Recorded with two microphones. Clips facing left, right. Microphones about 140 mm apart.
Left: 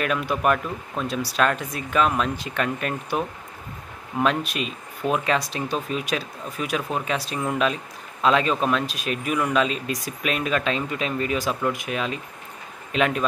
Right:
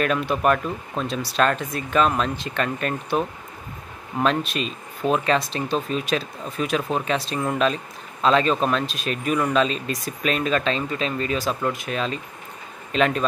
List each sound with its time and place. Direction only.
0.0 s speech: 10° left (ahead or behind)
1.0 s speech: 25° right (ahead or behind)
1.3 s speech: 5° left (ahead or behind)